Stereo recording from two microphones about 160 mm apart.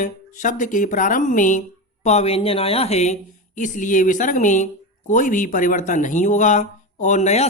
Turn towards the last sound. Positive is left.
turn(degrees=45)  # may be behind; listen again after turning